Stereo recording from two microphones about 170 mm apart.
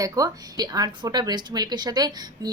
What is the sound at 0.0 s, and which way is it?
A woman's voice, 20° right (ahead or behind).